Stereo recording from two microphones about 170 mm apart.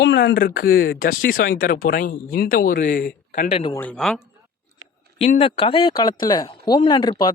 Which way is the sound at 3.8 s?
5° left (ahead or behind).